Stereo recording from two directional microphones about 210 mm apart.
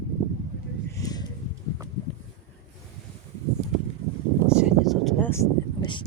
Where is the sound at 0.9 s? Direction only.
15° left (ahead or behind).